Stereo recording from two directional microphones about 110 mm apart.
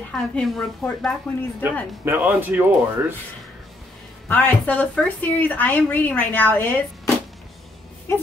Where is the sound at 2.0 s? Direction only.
15° right (ahead or behind).